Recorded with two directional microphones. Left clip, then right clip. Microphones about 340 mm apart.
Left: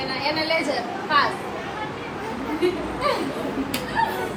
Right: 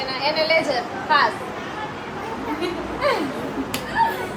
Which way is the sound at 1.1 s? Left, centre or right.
Right.